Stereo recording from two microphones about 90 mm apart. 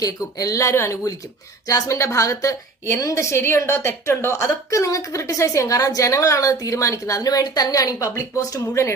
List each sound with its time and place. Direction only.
0.0 s a woman's voice: 40° left (ahead or behind)